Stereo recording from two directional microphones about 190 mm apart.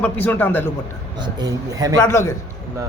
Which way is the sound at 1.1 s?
20° right (ahead or behind).